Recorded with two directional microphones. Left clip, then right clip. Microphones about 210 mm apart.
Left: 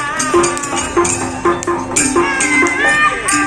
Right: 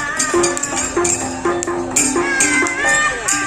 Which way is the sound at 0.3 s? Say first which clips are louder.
Left 5 dB; 60° right (ahead or behind).